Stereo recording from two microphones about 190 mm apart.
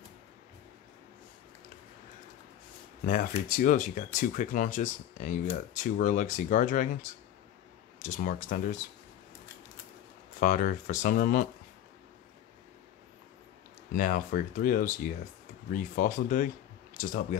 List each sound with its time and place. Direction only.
3.1 s speech: 45° left (ahead or behind)
10.4 s speech: 45° left (ahead or behind)
13.9 s speech: 45° left (ahead or behind)